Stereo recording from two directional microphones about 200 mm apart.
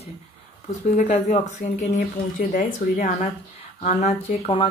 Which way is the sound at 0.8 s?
35° left (ahead or behind).